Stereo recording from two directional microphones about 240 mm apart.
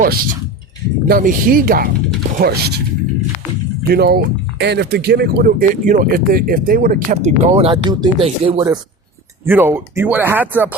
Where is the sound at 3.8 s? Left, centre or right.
Right.